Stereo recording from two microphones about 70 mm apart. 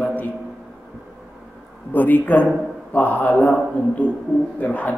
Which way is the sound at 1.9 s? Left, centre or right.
Left.